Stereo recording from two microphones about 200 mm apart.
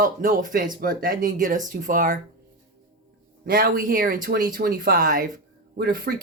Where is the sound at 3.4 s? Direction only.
45° right (ahead or behind).